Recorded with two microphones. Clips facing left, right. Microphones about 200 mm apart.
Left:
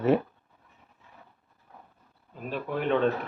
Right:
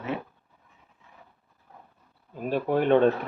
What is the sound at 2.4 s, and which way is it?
Speech, 45° right (ahead or behind).